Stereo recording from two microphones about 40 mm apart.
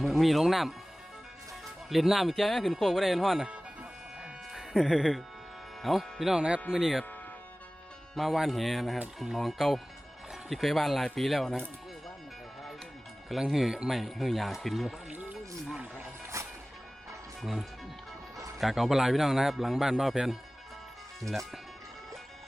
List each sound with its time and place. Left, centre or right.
0.0 s speech: centre
1.9 s speech: centre
4.5 s speech: centre
6.3 s speech: right
6.7 s a man's voice: centre
8.1 s speech: centre
13.5 s a man's voice: centre
15.1 s music: right
17.4 s a man's voice: centre